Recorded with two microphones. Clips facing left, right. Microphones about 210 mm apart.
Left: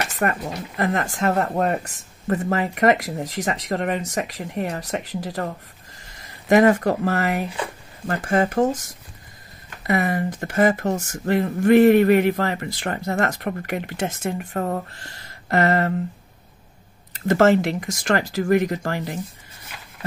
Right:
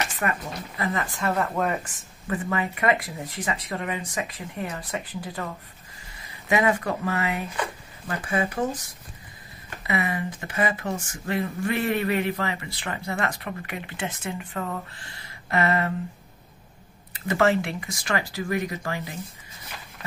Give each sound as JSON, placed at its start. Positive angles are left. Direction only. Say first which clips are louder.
{"t": 0.2, "sound": "speech", "louder": "left 8 dB", "side_deg": 45}
{"t": 3.7, "sound": "speech", "louder": "left 9 dB", "side_deg": 60}
{"t": 4.0, "sound": "speech", "louder": "left 5 dB", "side_deg": 40}
{"t": 6.5, "sound": "speech", "louder": "left 7 dB", "side_deg": 40}
{"t": 9.8, "sound": "speech", "louder": "left 6 dB", "side_deg": 45}
{"t": 17.3, "sound": "speech", "louder": "left 6 dB", "side_deg": 45}